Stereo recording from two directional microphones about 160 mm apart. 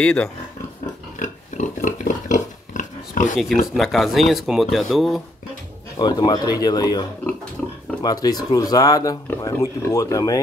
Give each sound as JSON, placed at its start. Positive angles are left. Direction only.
{"t": 0.0, "sound": "speech", "side_deg": 5}
{"t": 1.2, "sound": "pig", "side_deg": 50}
{"t": 3.7, "sound": "speech", "side_deg": 0}
{"t": 5.9, "sound": "speech", "side_deg": 25}